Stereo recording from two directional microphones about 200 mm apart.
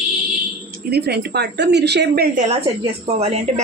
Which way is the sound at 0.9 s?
50° right (ahead or behind).